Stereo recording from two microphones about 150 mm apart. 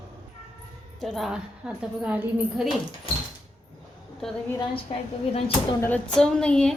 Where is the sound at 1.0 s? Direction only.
Centre (ahead or behind).